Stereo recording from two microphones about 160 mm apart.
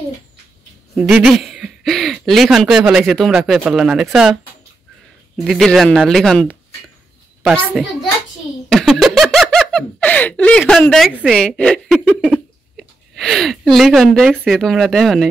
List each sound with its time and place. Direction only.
1.3 s speech: 5° right (ahead or behind)
5.4 s speech: centre (ahead or behind)
7.4 s speech: 5° right (ahead or behind)